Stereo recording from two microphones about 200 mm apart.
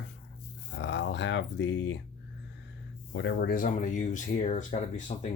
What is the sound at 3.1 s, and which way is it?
Speech, 60° left (ahead or behind).